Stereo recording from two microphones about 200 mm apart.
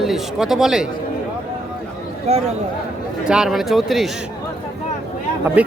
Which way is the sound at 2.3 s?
30° right (ahead or behind).